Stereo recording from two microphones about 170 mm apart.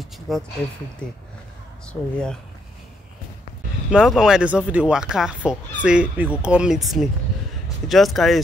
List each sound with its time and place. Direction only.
0.3 s speech: centre (ahead or behind)
1.9 s speech: 5° left (ahead or behind)
3.9 s speech: centre (ahead or behind)